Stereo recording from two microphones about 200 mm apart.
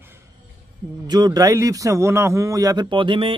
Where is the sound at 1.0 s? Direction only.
20° right (ahead or behind).